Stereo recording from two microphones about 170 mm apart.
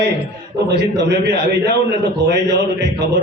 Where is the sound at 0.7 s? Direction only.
90° right.